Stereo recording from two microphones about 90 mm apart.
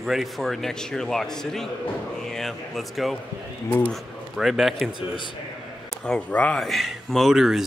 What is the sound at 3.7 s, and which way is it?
Speech, 20° left (ahead or behind).